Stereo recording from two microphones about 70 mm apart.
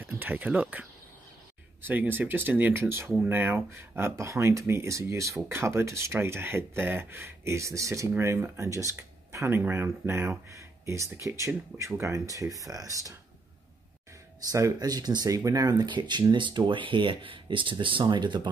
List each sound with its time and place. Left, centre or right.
0.0 s speech: right
2.7 s speech: right
10.5 s a sound: right
11.2 s speech: right
14.5 s speech: right
18.0 s speech: right